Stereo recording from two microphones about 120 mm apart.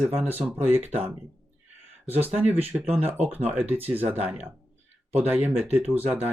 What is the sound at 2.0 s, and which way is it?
Speech, 15° right (ahead or behind).